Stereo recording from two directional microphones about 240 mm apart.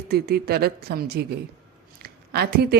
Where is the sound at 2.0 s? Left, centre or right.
Right.